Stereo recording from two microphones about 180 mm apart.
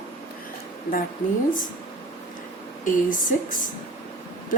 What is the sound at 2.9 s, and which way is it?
Speech, 45° left (ahead or behind).